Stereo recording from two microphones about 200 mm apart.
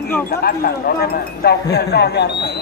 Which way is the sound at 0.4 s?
50° left (ahead or behind).